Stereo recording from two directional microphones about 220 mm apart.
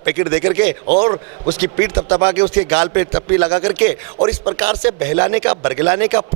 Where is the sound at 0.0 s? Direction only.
15° right (ahead or behind).